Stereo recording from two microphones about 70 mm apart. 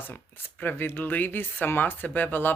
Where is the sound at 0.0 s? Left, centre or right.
Left.